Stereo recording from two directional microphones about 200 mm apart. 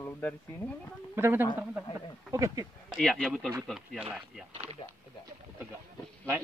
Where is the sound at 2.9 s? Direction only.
Centre (ahead or behind).